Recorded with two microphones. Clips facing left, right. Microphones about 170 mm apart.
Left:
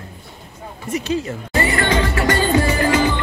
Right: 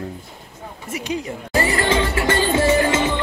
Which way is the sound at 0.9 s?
15° right (ahead or behind).